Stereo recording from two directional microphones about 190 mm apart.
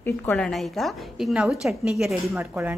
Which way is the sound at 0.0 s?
10° left (ahead or behind).